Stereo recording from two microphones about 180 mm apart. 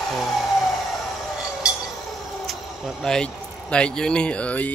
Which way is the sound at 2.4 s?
Centre (ahead or behind).